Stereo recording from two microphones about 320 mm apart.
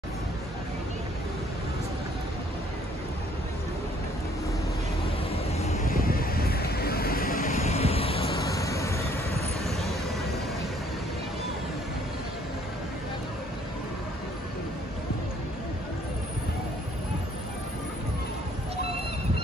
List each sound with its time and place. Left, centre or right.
5.6 s vehicle: left; by 9.0 s centre